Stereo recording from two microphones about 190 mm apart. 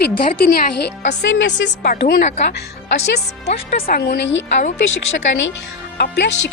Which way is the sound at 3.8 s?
55° left (ahead or behind).